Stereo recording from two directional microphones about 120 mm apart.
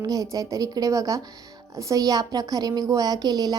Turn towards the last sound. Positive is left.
turn(degrees=-35)  # may be behind; listen again after turning